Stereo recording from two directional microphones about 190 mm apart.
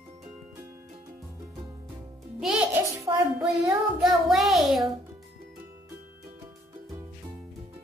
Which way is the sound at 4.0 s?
Centre (ahead or behind).